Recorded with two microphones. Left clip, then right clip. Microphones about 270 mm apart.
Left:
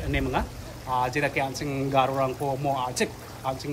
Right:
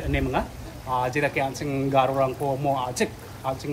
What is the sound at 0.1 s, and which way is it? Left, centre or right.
Speech, centre.